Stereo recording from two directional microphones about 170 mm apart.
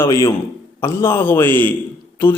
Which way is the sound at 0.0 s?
20° left (ahead or behind).